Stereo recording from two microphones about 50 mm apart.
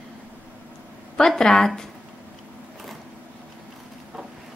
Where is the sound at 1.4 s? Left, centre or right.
Centre.